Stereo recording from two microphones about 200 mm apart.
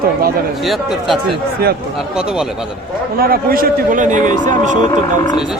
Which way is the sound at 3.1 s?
50° right (ahead or behind).